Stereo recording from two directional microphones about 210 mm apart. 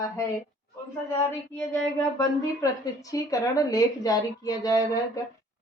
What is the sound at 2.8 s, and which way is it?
A woman's voice, 15° left (ahead or behind).